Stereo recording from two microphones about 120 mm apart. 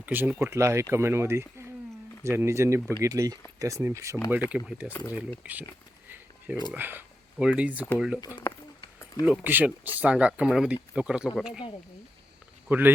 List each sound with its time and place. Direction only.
0.0 s speech: 15° right (ahead or behind)
4.4 s speech: 10° right (ahead or behind)
6.7 s speech: 15° right (ahead or behind)
8.4 s speech: 20° left (ahead or behind)
9.2 s speech: 10° right (ahead or behind)
12.6 s speech: 15° right (ahead or behind)